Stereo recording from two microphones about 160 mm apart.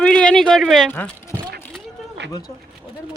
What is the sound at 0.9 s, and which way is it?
Speech, 10° left (ahead or behind).